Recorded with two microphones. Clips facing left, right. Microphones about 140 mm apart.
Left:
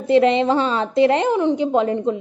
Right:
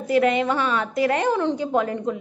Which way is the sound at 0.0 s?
25° left (ahead or behind).